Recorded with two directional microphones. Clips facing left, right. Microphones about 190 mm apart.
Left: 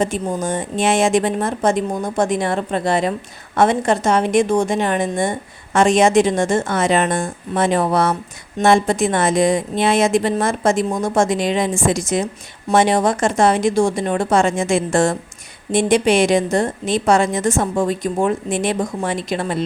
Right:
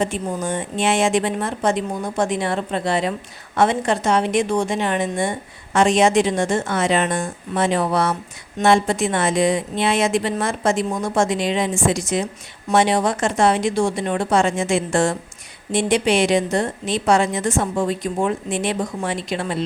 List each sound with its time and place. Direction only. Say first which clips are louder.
0.0 s a woman's voice: left 3 dB; 45° left (ahead or behind)